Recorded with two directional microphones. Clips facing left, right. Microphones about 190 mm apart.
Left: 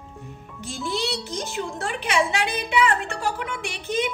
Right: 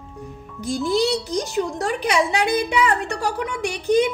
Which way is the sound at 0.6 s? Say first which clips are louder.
Right 8 dB; 40° right (ahead or behind).